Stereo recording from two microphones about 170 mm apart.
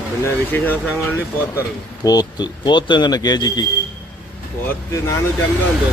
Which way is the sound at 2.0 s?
25° left (ahead or behind).